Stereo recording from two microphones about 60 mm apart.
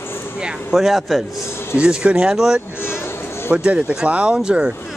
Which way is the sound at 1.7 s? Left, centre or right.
Centre.